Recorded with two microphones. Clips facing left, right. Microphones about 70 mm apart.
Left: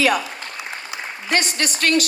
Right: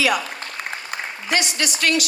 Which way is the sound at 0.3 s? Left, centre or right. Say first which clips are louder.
Right 1 dB; right.